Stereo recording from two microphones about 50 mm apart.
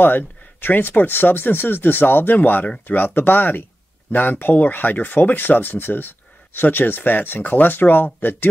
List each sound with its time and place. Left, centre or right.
0.0 s speech: left